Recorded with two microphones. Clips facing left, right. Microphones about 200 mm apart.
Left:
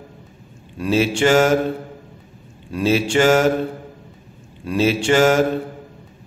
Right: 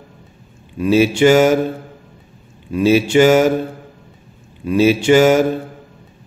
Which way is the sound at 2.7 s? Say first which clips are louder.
Right 5 dB; 5° right (ahead or behind).